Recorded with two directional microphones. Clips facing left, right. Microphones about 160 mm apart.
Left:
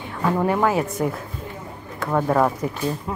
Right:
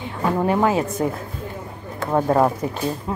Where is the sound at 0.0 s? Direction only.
20° right (ahead or behind).